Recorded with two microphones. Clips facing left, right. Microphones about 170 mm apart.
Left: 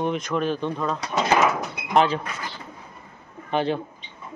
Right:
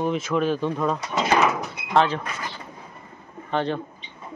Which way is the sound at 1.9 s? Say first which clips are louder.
Left 1 dB; 15° left (ahead or behind).